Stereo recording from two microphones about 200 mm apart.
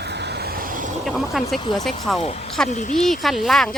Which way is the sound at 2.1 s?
30° left (ahead or behind).